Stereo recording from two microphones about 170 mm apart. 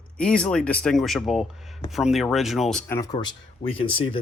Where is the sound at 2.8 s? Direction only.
15° left (ahead or behind).